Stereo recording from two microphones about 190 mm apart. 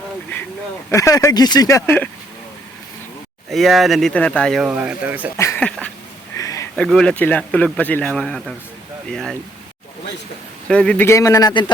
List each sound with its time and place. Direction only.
0.9 s speech: 15° left (ahead or behind)
3.5 s speech: centre (ahead or behind)
5.4 s a sound: 10° left (ahead or behind)
6.3 s a sound: 15° left (ahead or behind)
6.7 s speech: 5° left (ahead or behind)
10.7 s speech: 5° left (ahead or behind)